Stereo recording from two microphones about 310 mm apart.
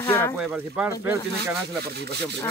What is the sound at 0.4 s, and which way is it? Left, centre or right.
Speech, centre.